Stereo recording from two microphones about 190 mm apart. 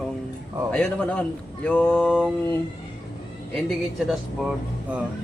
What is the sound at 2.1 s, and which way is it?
Speech, 5° right (ahead or behind).